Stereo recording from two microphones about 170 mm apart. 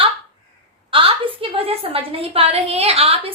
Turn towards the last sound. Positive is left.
turn(degrees=-35)  # may be behind; listen again after turning